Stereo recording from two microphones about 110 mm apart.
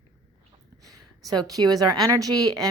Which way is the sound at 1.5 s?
35° right (ahead or behind).